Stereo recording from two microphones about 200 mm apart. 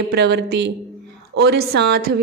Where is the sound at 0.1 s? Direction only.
55° right (ahead or behind).